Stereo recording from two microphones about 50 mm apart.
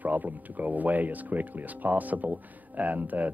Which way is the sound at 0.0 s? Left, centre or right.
Right.